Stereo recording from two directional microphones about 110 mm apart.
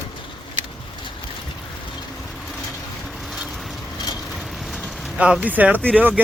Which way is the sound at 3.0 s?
Centre (ahead or behind).